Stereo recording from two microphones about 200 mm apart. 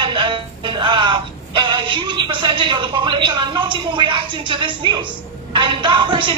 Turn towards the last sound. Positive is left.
turn(degrees=-25)  # may be behind; listen again after turning